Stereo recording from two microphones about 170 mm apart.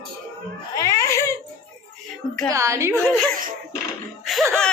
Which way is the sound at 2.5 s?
20° right (ahead or behind).